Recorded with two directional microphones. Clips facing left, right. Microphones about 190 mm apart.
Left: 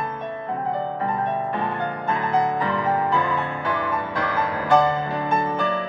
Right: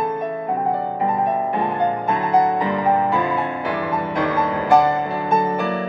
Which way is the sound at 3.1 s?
20° right (ahead or behind).